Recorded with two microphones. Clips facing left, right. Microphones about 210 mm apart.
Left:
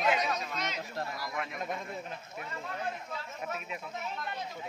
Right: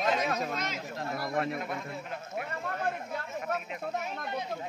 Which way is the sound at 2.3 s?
55° right (ahead or behind).